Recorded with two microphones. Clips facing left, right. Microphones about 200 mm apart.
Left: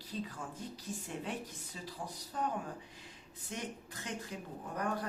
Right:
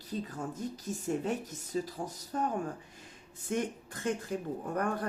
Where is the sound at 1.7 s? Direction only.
45° right (ahead or behind).